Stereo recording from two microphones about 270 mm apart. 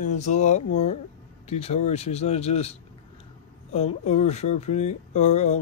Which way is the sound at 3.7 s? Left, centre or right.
Left.